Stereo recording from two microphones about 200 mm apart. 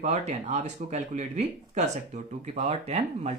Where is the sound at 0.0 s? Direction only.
35° right (ahead or behind).